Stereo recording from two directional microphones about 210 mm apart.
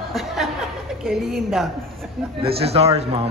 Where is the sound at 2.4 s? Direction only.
25° right (ahead or behind).